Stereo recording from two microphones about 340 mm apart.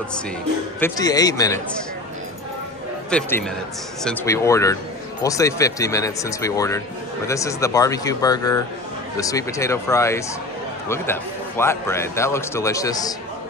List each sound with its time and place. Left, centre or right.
0.7 s a man's voice: centre
3.1 s a man's voice: centre